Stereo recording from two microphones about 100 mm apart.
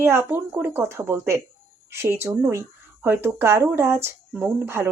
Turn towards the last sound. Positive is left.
turn(degrees=-25)  # may be behind; listen again after turning